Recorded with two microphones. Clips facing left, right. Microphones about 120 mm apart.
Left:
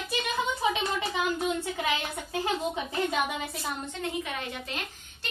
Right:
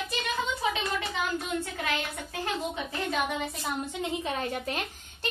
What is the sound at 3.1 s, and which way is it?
Speech, 5° left (ahead or behind).